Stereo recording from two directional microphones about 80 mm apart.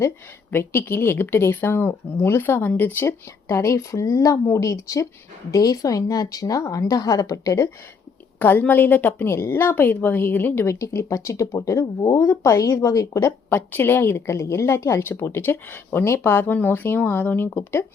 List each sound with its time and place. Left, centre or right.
0.5 s a woman's voice: left
8.4 s a woman's voice: left
13.5 s a woman's voice: left